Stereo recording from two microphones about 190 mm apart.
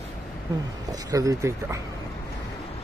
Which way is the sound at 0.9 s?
20° right (ahead or behind).